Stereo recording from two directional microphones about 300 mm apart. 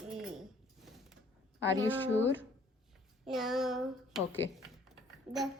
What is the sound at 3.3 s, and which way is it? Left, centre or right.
Speech, centre.